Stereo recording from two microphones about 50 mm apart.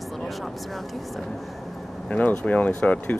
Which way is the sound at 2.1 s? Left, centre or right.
Left.